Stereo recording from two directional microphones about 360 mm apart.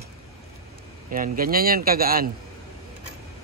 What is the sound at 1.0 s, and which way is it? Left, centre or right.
A man's voice, right.